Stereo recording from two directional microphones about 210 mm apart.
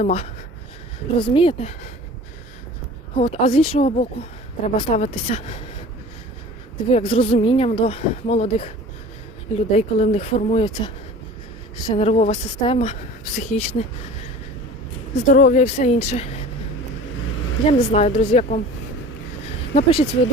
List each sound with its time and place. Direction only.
0.0 s speech: 30° left (ahead or behind)
3.2 s speech: 30° left (ahead or behind)
6.9 s speech: 25° left (ahead or behind)
15.1 s a woman's voice: 40° left (ahead or behind)
17.7 s a woman's voice: 30° left (ahead or behind)
19.7 s speech: 25° left (ahead or behind)